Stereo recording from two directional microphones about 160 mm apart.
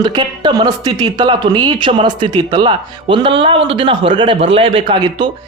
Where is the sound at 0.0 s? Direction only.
30° right (ahead or behind).